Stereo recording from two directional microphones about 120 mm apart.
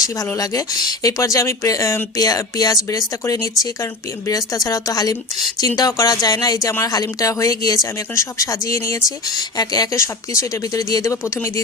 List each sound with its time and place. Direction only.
0.3 s speech: 30° left (ahead or behind)